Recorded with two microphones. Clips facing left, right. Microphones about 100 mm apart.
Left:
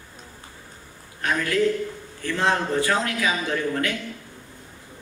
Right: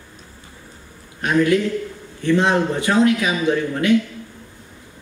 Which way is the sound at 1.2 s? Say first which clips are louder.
Right 5 dB; 20° right (ahead or behind).